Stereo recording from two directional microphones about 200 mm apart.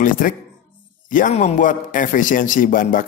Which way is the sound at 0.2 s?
45° left (ahead or behind).